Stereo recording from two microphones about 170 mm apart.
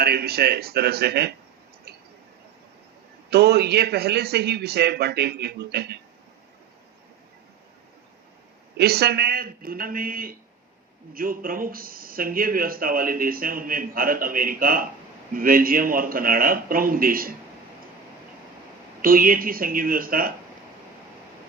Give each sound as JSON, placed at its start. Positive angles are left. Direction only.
{"t": 0.0, "sound": "a man's voice", "side_deg": -65}
{"t": 3.2, "sound": "a man's voice", "side_deg": -70}
{"t": 8.8, "sound": "speech", "side_deg": -70}
{"t": 19.0, "sound": "speech", "side_deg": -55}